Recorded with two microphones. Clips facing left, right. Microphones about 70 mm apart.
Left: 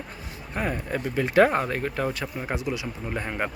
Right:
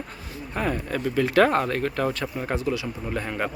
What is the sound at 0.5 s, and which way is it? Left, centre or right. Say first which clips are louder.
Speech: right 1 dB; centre.